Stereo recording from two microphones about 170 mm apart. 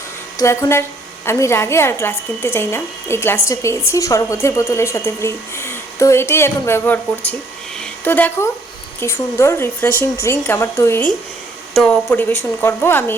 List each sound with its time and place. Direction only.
0.3 s a woman's voice: 20° left (ahead or behind)
7.8 s a sound: 10° left (ahead or behind)
9.0 s a woman's voice: 15° left (ahead or behind)